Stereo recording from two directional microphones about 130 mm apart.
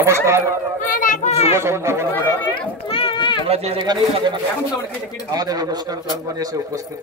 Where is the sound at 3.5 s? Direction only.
50° right (ahead or behind).